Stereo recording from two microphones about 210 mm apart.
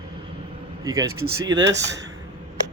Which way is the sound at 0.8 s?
15° right (ahead or behind).